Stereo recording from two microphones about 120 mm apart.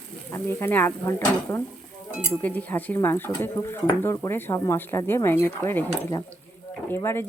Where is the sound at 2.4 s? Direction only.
15° left (ahead or behind).